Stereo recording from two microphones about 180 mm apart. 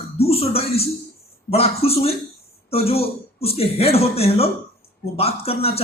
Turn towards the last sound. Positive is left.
turn(degrees=35)  # may be behind; listen again after turning